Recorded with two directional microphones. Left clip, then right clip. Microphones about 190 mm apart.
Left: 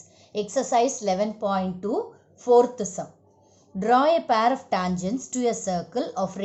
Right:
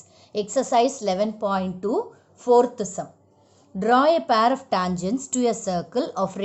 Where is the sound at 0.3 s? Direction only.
15° right (ahead or behind).